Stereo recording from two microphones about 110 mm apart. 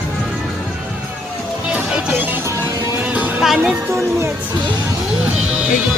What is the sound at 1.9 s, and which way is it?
Music, 15° right (ahead or behind).